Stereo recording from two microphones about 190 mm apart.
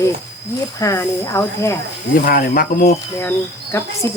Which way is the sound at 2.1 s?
45° left (ahead or behind).